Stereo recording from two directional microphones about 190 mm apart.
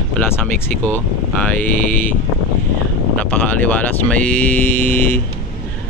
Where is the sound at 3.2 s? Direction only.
10° left (ahead or behind).